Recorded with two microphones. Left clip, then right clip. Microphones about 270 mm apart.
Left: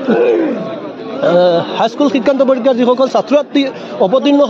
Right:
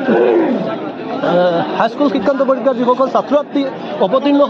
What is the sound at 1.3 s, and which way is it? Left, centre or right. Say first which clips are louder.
A man's voice: left 3 dB; left.